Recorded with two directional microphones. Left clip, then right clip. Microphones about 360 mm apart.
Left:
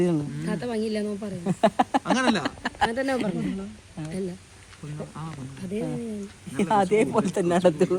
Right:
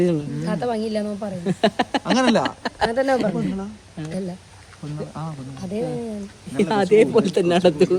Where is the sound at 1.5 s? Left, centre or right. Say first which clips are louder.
Right 1 dB; centre.